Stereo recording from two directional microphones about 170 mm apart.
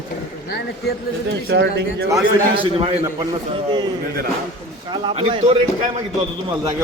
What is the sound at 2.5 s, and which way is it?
Speech, 30° right (ahead or behind).